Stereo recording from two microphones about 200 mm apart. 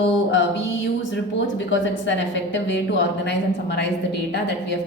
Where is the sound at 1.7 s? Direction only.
65° left (ahead or behind).